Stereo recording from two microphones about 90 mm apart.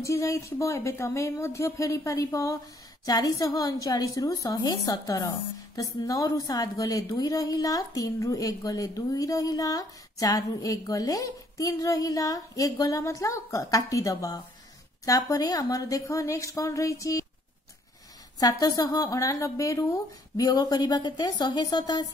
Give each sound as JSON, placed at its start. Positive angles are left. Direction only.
{"t": 0.0, "sound": "a woman's voice", "side_deg": 35}
{"t": 18.4, "sound": "a woman's voice", "side_deg": 45}
{"t": 20.4, "sound": "a woman's voice", "side_deg": 45}